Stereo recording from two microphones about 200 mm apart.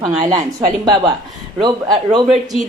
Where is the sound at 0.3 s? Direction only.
20° right (ahead or behind).